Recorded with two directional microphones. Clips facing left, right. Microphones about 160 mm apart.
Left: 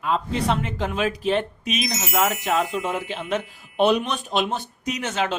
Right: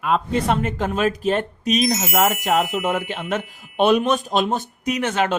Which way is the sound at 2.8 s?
55° right (ahead or behind).